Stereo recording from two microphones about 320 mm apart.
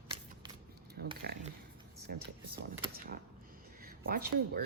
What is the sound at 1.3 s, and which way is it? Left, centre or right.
Speech, right.